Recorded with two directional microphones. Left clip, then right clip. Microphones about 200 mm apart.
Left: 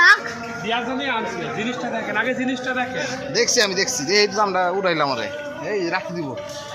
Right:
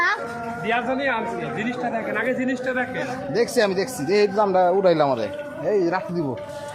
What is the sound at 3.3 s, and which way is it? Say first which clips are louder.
Speech: left 1 dB; 50° right (ahead or behind).